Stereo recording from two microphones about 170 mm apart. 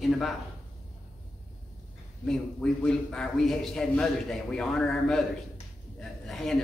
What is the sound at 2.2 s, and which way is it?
A man's voice, 5° left (ahead or behind).